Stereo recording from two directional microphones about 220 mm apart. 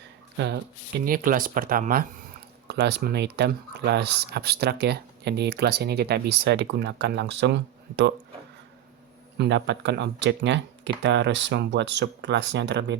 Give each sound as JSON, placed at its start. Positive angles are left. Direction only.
{"t": 0.3, "sound": "speech", "side_deg": -50}
{"t": 9.4, "sound": "speech", "side_deg": -50}